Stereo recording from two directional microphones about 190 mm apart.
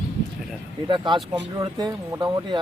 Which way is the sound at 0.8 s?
25° right (ahead or behind).